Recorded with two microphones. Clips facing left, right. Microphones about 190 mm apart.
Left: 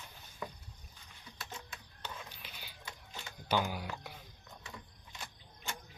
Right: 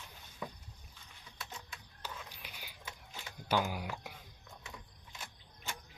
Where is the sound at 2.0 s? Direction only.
10° right (ahead or behind).